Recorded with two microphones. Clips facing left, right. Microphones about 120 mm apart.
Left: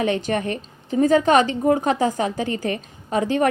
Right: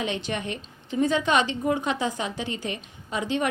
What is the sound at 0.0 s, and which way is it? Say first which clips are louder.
A woman's voice: left 7 dB; 45° left (ahead or behind).